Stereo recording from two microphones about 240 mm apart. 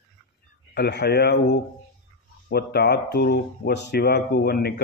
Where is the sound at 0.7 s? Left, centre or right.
Left.